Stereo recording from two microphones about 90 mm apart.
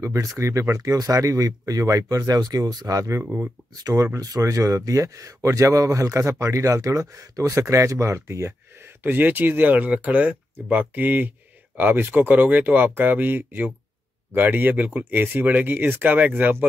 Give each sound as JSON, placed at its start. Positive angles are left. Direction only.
{"t": 0.0, "sound": "speech", "side_deg": -35}
{"t": 9.0, "sound": "speech", "side_deg": -20}